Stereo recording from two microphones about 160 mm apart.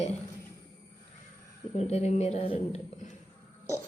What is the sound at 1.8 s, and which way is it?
Speech, 40° left (ahead or behind).